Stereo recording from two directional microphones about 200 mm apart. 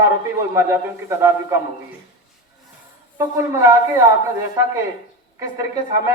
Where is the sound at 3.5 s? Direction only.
15° right (ahead or behind).